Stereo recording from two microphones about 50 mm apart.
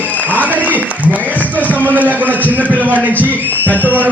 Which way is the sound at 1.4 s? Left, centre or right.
Right.